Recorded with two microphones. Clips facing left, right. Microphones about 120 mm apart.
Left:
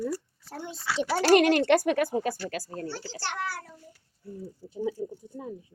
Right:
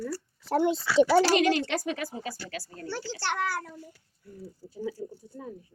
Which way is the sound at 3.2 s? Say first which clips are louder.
Right 4 dB; 55° right (ahead or behind).